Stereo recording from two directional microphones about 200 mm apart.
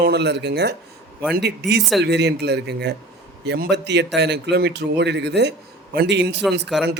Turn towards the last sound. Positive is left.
turn(degrees=0)  # may be behind; listen again after turning